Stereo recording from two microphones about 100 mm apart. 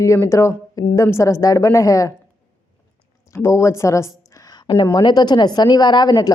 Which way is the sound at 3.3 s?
30° left (ahead or behind).